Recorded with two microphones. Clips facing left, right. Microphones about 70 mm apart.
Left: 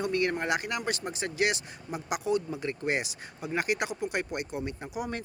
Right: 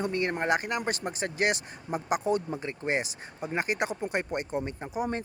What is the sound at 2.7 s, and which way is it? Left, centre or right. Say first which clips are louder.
Speech: even; right.